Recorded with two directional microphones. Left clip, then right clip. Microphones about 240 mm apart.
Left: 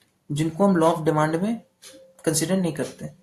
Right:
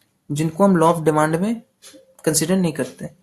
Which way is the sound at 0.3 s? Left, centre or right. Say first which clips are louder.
Right 4 dB; right.